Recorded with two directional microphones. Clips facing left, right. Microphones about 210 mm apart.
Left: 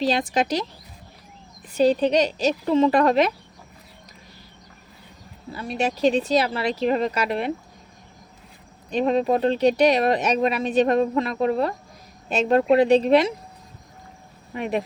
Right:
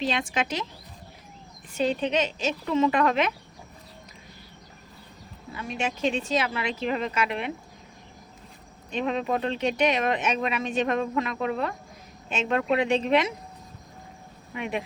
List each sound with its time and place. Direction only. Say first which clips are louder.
0.0 s speech: left 6 dB; 35° left (ahead or behind)
1.7 s speech: left 7 dB; 35° left (ahead or behind)
5.5 s speech: left 5 dB; 35° left (ahead or behind)
8.9 s speech: left 7 dB; 35° left (ahead or behind)
14.5 s speech: left 5 dB; 40° left (ahead or behind)